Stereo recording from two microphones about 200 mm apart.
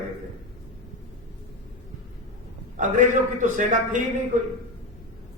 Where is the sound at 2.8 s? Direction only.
40° right (ahead or behind).